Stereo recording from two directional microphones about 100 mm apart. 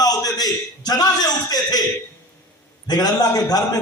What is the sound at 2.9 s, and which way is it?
Speech, 40° left (ahead or behind).